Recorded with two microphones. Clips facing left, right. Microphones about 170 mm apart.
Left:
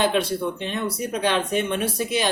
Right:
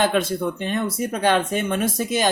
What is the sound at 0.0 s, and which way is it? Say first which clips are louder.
Speech: right 1 dB; 50° right (ahead or behind).